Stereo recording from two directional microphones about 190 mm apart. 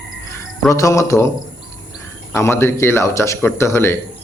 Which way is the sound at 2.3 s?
15° left (ahead or behind).